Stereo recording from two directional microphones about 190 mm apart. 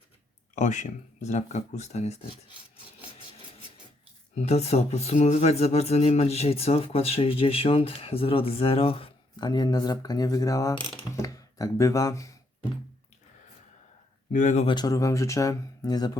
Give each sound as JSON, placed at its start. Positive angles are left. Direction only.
{"t": 0.5, "sound": "speech", "side_deg": 40}
{"t": 4.4, "sound": "speech", "side_deg": 35}
{"t": 14.3, "sound": "speech", "side_deg": 40}
{"t": 14.8, "sound": "speech", "side_deg": 20}